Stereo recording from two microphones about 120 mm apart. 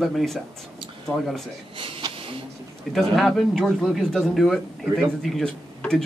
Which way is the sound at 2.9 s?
Centre (ahead or behind).